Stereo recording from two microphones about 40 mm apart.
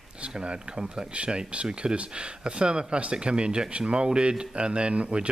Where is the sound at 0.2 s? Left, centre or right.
Right.